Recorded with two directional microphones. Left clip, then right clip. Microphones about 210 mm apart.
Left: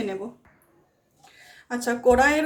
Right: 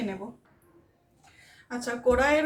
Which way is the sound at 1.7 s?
60° left (ahead or behind).